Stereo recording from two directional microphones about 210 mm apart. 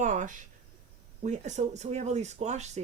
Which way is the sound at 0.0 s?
35° right (ahead or behind).